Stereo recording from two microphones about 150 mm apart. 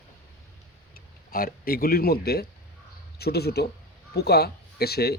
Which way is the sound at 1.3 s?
80° left.